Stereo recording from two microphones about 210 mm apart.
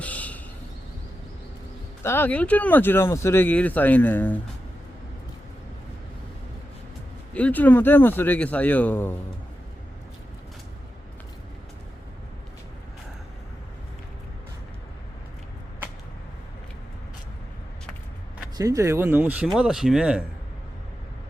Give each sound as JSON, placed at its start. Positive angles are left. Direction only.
{"t": 0.0, "sound": "a sound", "side_deg": 5}
{"t": 2.0, "sound": "speech", "side_deg": 10}
{"t": 7.3, "sound": "speech", "side_deg": 5}
{"t": 18.5, "sound": "speech", "side_deg": -15}